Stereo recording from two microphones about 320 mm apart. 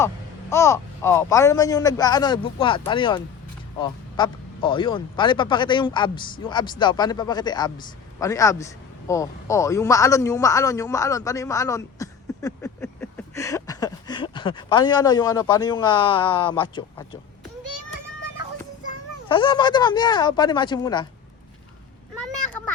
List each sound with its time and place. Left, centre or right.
0.5 s a man's voice: centre
17.6 s children playing: right
19.3 s a man's voice: centre